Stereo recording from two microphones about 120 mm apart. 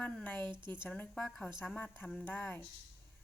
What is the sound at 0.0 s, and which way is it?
A woman's voice, 10° left (ahead or behind).